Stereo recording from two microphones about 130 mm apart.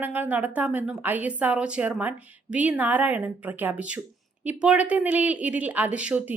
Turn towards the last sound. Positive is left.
turn(degrees=-10)  # may be behind; listen again after turning